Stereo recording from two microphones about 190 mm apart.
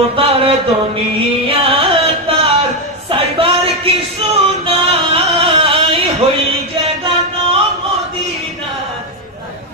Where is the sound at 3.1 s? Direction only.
30° right (ahead or behind).